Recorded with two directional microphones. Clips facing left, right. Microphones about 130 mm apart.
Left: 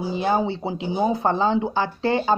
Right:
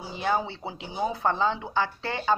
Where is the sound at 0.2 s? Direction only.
25° left (ahead or behind).